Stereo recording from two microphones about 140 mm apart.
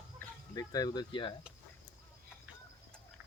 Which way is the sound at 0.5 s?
25° left (ahead or behind).